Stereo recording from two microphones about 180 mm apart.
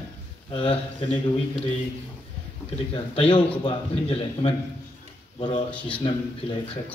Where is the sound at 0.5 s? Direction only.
30° left (ahead or behind).